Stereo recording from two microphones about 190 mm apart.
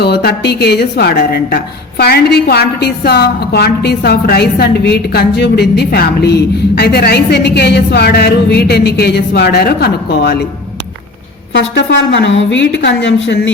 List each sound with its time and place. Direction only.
0.0 s a woman's voice: 55° left (ahead or behind)
11.7 s a woman's voice: 60° left (ahead or behind)